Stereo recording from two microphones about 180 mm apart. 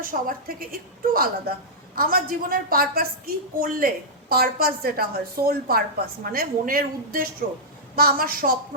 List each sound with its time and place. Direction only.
0.0 s a woman's voice: 50° right (ahead or behind)